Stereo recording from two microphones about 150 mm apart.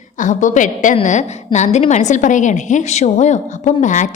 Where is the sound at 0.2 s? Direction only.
55° left (ahead or behind).